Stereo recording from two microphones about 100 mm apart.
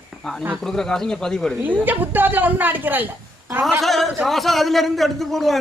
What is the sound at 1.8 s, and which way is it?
A woman's voice, 20° right (ahead or behind).